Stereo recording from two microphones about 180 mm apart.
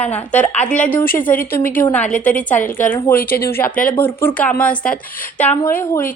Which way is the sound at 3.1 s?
55° left (ahead or behind).